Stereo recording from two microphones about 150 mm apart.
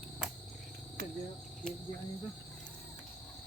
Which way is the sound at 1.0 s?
90° right.